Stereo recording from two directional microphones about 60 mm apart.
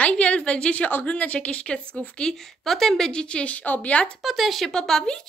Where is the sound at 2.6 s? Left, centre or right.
Centre.